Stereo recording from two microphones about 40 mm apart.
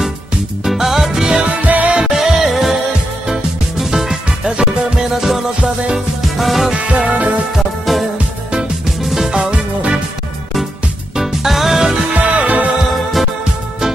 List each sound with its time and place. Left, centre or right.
0.7 s music: centre
1.4 s music: right
2.0 s music: centre
5.9 s music: centre
6.8 s music: right
7.5 s music: centre
9.0 s music: centre
9.5 s music: right
11.1 s music: centre
12.1 s music: right